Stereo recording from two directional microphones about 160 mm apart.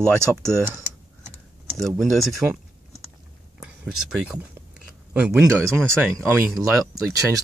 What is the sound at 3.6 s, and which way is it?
Speech, 5° right (ahead or behind).